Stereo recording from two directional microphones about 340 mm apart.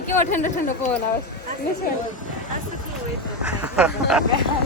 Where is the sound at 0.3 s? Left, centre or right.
Left.